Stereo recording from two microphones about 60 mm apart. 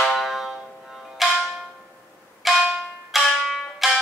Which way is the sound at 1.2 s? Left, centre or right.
Centre.